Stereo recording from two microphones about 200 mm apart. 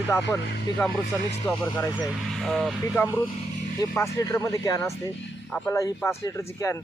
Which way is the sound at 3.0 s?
10° left (ahead or behind).